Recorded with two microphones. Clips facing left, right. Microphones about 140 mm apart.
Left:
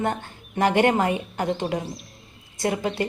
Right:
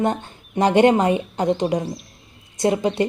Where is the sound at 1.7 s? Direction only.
Centre (ahead or behind).